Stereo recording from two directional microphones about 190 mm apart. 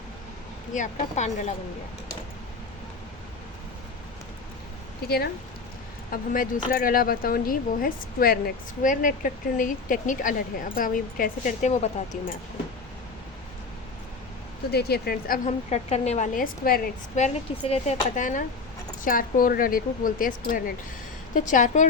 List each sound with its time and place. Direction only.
0.7 s speech: 40° left (ahead or behind)
5.0 s speech: 55° left (ahead or behind); by 11.9 s 40° left (ahead or behind)
14.7 s speech: 55° left (ahead or behind)
15.4 s speech: 35° left (ahead or behind); by 16.9 s 50° left (ahead or behind)
17.2 s speech: 35° left (ahead or behind)